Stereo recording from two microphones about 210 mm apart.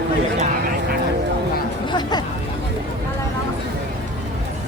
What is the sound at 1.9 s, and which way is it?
Chatter, 20° left (ahead or behind).